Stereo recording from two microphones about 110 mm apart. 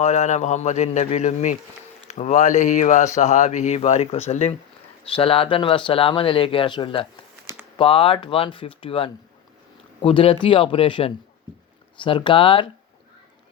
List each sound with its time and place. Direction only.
0.0 s speech: 90° left
5.1 s speech: 55° left (ahead or behind)